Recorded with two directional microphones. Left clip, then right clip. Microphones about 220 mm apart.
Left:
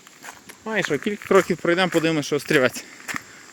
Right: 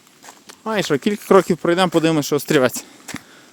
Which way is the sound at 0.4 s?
35° right (ahead or behind).